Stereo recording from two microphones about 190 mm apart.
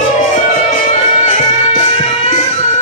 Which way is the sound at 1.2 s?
40° left (ahead or behind).